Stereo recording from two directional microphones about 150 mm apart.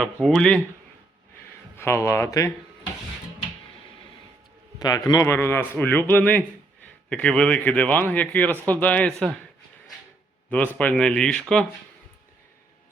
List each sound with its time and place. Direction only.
0.0 s speech: 5° left (ahead or behind)
1.7 s speech: 15° left (ahead or behind)
4.8 s a man's voice: 25° left (ahead or behind); by 9.4 s 5° left (ahead or behind)
10.8 s a man's voice: 10° left (ahead or behind)